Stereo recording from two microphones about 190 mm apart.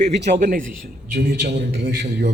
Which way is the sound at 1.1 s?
65° right (ahead or behind).